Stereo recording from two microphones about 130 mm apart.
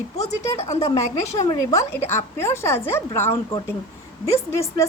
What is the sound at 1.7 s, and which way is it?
Speech, 20° left (ahead or behind).